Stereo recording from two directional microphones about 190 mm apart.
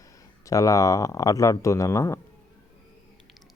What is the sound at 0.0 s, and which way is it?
Speech, 15° left (ahead or behind).